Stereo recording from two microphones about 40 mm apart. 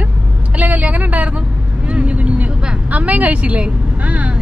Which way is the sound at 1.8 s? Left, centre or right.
Right.